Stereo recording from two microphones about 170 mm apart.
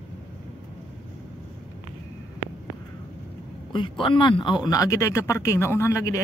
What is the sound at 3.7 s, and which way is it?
Speech, 30° left (ahead or behind).